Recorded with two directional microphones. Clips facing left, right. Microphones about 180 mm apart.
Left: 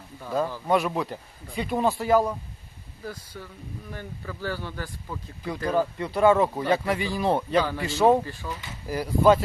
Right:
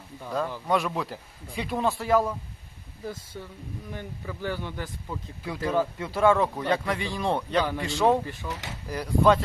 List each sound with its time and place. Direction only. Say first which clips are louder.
0.3 s speech: left 3 dB; centre (ahead or behind)
3.9 s speech: even; 20° right (ahead or behind)
5.4 s speech: left 1 dB; centre (ahead or behind)